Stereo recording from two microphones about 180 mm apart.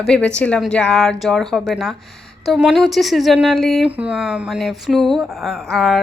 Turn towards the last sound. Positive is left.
turn(degrees=0)  # may be behind; listen again after turning